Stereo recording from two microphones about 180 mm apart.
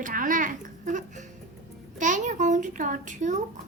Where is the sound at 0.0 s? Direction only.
50° right (ahead or behind).